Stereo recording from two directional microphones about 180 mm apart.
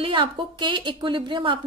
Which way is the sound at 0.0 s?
30° right (ahead or behind).